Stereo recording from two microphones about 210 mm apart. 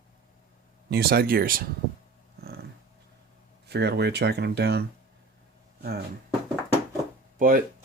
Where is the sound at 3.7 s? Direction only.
50° right (ahead or behind).